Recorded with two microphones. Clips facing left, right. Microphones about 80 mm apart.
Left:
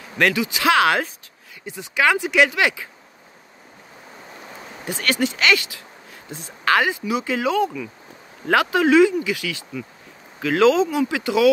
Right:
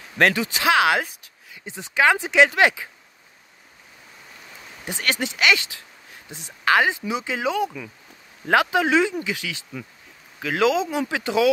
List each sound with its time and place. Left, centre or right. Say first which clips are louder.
0.2 s speech: even; right
0.7 s speech: left 1 dB; centre
1.7 s speech: even; right
4.8 s speech: left 4 dB; right